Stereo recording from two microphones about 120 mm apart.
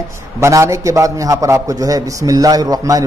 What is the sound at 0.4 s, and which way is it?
A man's voice, 25° right (ahead or behind).